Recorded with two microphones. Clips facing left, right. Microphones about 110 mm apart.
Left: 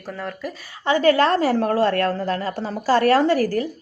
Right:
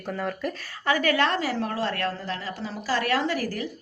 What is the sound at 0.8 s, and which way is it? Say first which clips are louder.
A woman's voice: left 6 dB; 30° left (ahead or behind).